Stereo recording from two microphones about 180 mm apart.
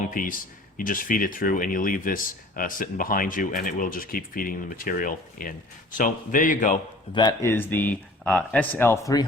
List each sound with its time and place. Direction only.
0.1 s speech: 50° left (ahead or behind)
7.1 s speech: 25° left (ahead or behind)